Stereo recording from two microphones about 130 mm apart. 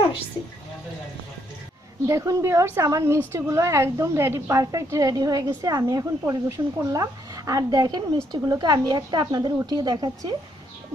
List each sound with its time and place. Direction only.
2.0 s a woman's voice: 20° right (ahead or behind)